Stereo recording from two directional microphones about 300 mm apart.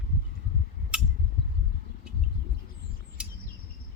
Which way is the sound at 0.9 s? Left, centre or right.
Centre.